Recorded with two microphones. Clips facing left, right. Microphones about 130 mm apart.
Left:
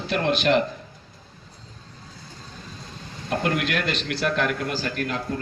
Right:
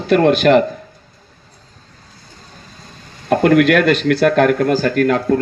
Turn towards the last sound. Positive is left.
turn(degrees=-65)  # may be behind; listen again after turning